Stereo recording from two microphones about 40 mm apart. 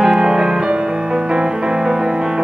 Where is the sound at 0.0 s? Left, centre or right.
Centre.